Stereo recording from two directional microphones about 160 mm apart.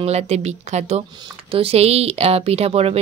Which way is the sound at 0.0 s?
40° right (ahead or behind).